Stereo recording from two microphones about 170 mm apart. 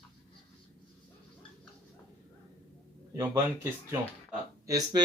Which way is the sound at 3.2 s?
15° right (ahead or behind).